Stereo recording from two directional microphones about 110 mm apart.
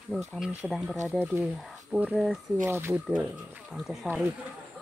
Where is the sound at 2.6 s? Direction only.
20° right (ahead or behind).